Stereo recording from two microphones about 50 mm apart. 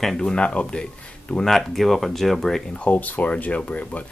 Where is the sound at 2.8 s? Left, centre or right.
Left.